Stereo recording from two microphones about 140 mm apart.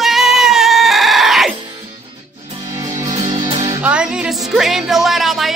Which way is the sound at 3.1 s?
55° right (ahead or behind).